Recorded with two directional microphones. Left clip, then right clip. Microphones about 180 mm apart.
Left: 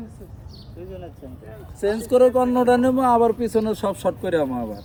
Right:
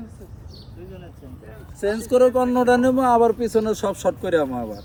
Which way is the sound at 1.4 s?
45° left (ahead or behind).